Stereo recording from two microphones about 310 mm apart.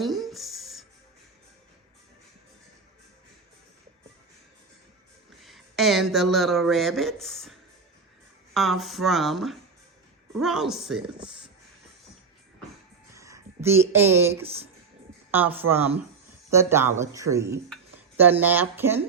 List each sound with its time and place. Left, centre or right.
0.0 s a sound: centre
5.4 s speech: centre
8.5 s speech: centre
13.1 s speech: centre
14.4 s speech: centre
15.3 s speech: centre